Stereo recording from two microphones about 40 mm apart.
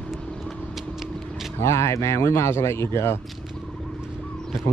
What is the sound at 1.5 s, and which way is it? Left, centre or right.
Speech, left.